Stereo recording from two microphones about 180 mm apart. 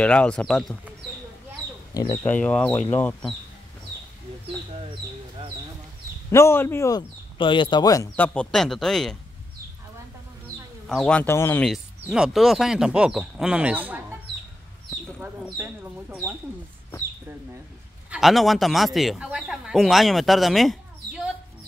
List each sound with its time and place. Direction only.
0.0 s speech: 5° left (ahead or behind)
2.0 s speech: 15° left (ahead or behind)
6.3 s speech: 15° left (ahead or behind)
7.3 s speech: 25° left (ahead or behind)
8.2 s speech: 5° left (ahead or behind)
10.9 s speech: 5° left (ahead or behind)
12.0 s speech: 5° right (ahead or behind)
15.1 s speech: 5° right (ahead or behind)
18.1 s speech: centre (ahead or behind)